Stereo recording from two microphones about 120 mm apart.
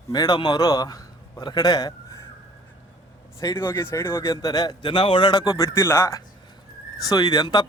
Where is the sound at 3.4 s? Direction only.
25° left (ahead or behind).